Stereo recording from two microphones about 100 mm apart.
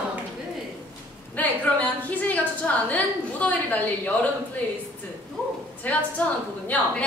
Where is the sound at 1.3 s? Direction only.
15° left (ahead or behind).